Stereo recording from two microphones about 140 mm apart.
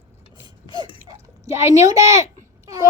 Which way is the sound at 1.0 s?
20° right (ahead or behind).